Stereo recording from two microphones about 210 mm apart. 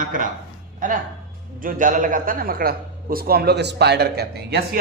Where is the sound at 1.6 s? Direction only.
40° right (ahead or behind).